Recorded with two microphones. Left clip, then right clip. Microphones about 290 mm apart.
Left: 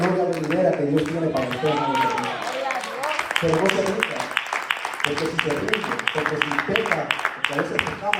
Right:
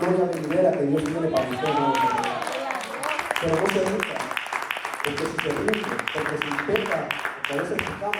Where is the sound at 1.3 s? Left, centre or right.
Right.